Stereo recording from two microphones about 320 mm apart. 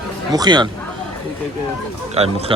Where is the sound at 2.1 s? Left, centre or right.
Centre.